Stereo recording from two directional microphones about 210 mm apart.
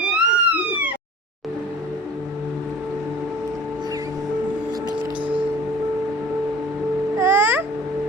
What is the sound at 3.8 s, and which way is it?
Music, 15° right (ahead or behind).